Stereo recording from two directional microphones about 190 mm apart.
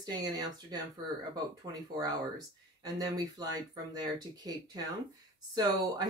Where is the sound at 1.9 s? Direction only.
20° right (ahead or behind).